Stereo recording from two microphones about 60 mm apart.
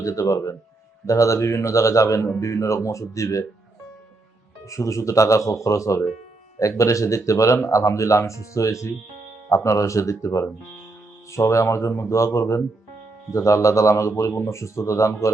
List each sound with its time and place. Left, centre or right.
0.0 s speech: left
4.6 s speech: left